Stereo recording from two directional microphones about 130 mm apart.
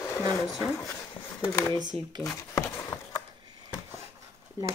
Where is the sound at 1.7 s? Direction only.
35° right (ahead or behind).